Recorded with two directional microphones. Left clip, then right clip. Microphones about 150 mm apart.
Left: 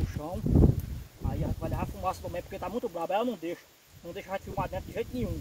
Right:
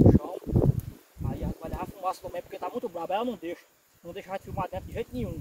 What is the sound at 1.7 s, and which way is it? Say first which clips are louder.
Speech: right 2 dB; 35° right (ahead or behind).